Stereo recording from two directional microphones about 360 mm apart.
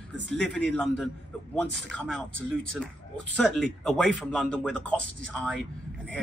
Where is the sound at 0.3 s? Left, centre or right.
Centre.